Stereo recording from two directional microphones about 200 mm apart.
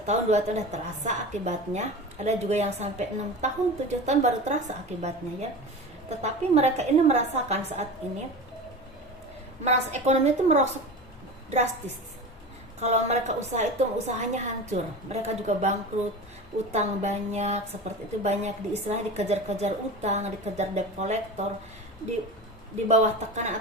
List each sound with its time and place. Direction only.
0.0 s a woman's voice: 35° right (ahead or behind)
9.6 s a woman's voice: 35° right (ahead or behind)
12.8 s a woman's voice: 35° right (ahead or behind)
22.9 s a woman's voice: 35° right (ahead or behind)